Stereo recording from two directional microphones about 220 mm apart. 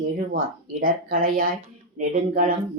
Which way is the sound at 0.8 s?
40° right (ahead or behind).